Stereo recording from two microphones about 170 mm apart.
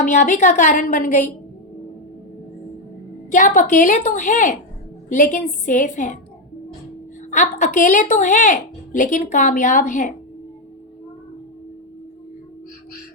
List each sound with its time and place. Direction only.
0.0 s a woman's voice: 45° left (ahead or behind)
3.3 s a woman's voice: 50° left (ahead or behind)
7.3 s a woman's voice: 45° left (ahead or behind)